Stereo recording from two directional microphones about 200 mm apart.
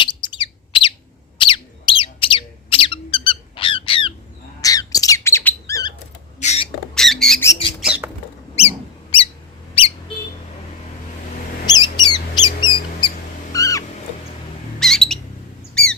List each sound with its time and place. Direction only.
0.0 s bird: 25° left (ahead or behind)
1.4 s squawk: 25° left (ahead or behind)
6.4 s rodents: 35° left (ahead or behind)
6.9 s rodents: centre (ahead or behind)
8.6 s a sound: 30° left (ahead or behind)
9.8 s a sound: 30° left (ahead or behind)
11.6 s bird: 20° left (ahead or behind)
14.8 s bird: centre (ahead or behind)
15.7 s squawk: 5° left (ahead or behind)